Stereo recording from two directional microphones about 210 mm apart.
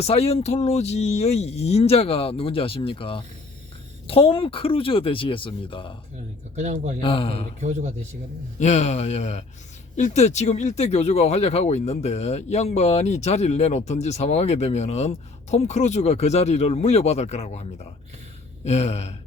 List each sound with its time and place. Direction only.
0.0 s speech: 30° left (ahead or behind)
6.6 s a man's voice: 35° right (ahead or behind)
7.0 s speech: 25° left (ahead or behind)
7.6 s a man's voice: 30° right (ahead or behind)
8.5 s speech: 35° left (ahead or behind)